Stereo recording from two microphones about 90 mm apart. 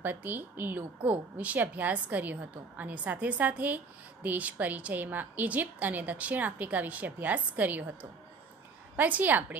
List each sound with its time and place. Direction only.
0.0 s a woman's voice: 20° right (ahead or behind)